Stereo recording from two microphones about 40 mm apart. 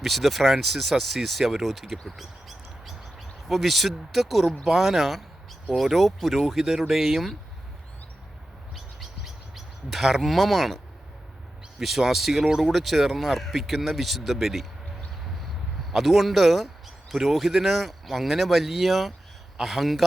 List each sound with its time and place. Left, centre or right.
0.0 s speech: centre
8.7 s chirp: centre
11.8 s speech: centre
12.5 s speech: centre
12.7 s speech: centre